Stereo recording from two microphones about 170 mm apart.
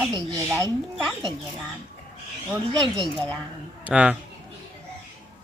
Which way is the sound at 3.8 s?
5° right (ahead or behind).